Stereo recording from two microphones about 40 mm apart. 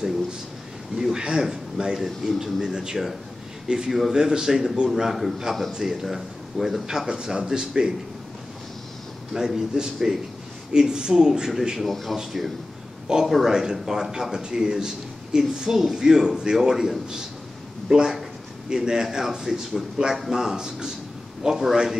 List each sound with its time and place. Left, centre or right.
0.9 s a man's voice: centre
5.9 s a man's voice: centre
9.3 s a man's voice: centre
11.9 s a man's voice: centre
15.7 s a man's voice: centre
16.0 s a man's voice: centre